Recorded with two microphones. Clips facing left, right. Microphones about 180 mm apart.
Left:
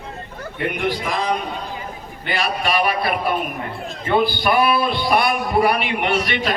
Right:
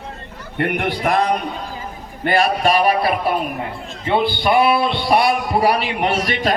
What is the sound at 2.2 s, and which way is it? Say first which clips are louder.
Speech: right 6 dB; 50° right (ahead or behind).